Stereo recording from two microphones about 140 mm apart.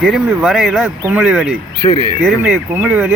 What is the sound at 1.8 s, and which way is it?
Speech, 35° left (ahead or behind).